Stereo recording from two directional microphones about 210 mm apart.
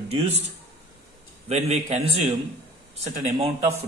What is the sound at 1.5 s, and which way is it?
Speech, 30° right (ahead or behind).